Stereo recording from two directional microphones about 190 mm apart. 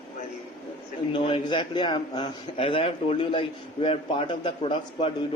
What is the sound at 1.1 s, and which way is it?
A man's voice, 25° left (ahead or behind).